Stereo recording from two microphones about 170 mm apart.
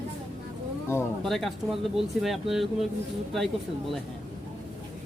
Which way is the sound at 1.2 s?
Centre (ahead or behind).